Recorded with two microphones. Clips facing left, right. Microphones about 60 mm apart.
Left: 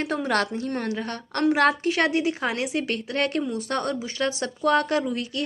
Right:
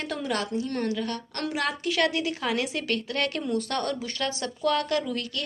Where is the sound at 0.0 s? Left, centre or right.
Left.